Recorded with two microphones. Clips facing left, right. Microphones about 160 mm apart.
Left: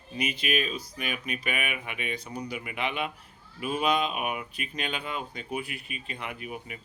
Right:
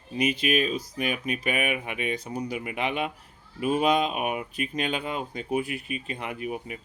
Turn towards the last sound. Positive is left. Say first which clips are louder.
# right 6 dB
turn(degrees=-40)  # may be behind; listen again after turning